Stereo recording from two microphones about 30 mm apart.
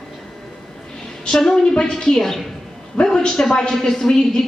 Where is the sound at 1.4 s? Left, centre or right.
Left.